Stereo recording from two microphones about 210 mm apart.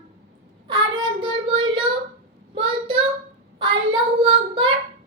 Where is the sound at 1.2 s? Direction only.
25° right (ahead or behind).